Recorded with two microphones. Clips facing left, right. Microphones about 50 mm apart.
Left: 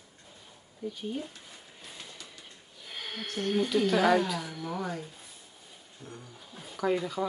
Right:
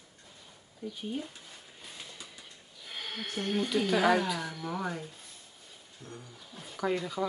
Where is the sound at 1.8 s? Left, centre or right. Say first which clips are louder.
Even; centre.